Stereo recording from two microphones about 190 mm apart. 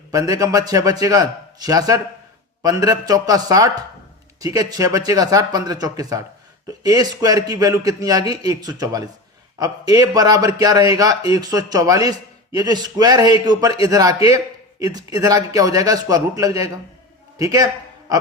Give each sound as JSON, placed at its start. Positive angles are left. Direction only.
{"t": 0.1, "sound": "a man's voice", "side_deg": -20}